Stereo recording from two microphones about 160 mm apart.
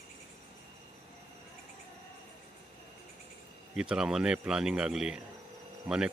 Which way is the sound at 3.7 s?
5° right (ahead or behind).